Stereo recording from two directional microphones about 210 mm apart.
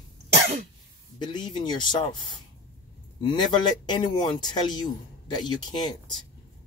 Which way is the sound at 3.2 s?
20° left (ahead or behind).